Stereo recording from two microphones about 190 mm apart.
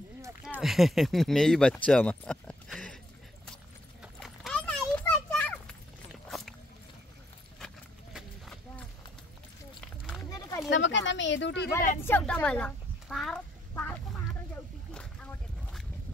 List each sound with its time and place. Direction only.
0.4 s speech: 5° right (ahead or behind)
4.0 s clip-clop: centre (ahead or behind)
6.2 s a sound: centre (ahead or behind)
7.5 s horse: centre (ahead or behind)
10.7 s speech: 75° left (ahead or behind)
12.0 s a woman's voice: 10° left (ahead or behind)